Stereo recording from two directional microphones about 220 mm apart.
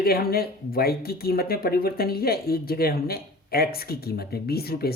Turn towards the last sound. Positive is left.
turn(degrees=45)  # may be behind; listen again after turning